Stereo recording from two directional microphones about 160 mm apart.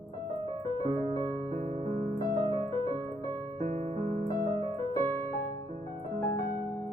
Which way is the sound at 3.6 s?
45° right (ahead or behind).